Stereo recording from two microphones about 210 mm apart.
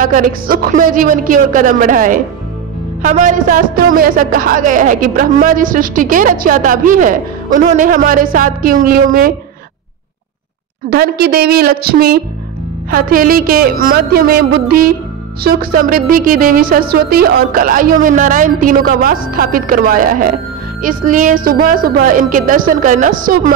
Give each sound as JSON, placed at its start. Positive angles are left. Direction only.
{"t": 0.0, "sound": "speech", "side_deg": -40}
{"t": 10.9, "sound": "a woman's voice", "side_deg": -45}